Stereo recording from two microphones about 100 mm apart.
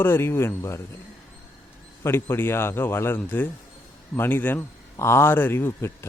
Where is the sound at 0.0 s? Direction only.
25° left (ahead or behind).